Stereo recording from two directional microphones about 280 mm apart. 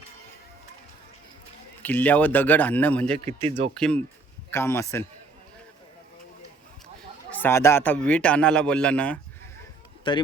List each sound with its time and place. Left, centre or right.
1.8 s a man's voice: centre
3.2 s speech: right
3.8 s a man's voice: centre
7.3 s a man's voice: centre
10.1 s a man's voice: centre